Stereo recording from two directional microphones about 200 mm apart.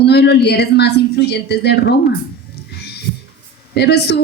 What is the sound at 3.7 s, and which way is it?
Speech, 55° left (ahead or behind).